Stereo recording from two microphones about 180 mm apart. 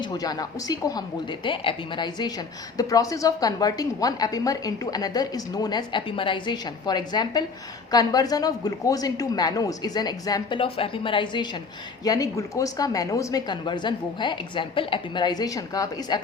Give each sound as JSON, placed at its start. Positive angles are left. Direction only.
{"t": 0.0, "sound": "a woman's voice", "side_deg": 20}